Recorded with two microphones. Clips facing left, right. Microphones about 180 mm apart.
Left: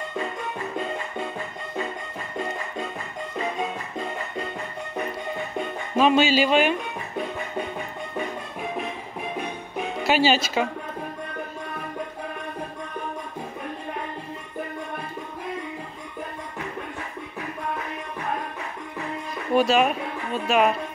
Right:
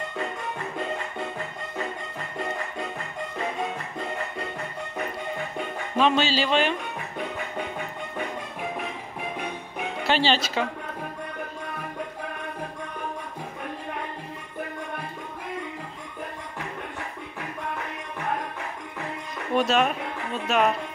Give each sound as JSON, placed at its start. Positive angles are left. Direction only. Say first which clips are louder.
{"t": 5.9, "sound": "speech", "louder": "left 4 dB", "side_deg": 10}
{"t": 10.0, "sound": "speech", "louder": "left 3 dB", "side_deg": 10}
{"t": 19.5, "sound": "speech", "louder": "left 3 dB", "side_deg": 5}